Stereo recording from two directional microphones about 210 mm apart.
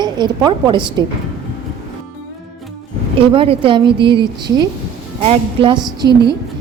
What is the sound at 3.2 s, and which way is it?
A woman's voice, 25° right (ahead or behind).